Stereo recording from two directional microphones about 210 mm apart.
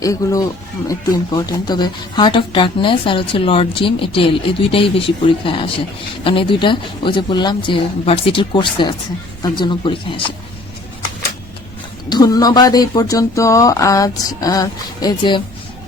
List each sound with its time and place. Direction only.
0.0 s speech: 15° left (ahead or behind)
12.0 s speech: 20° left (ahead or behind)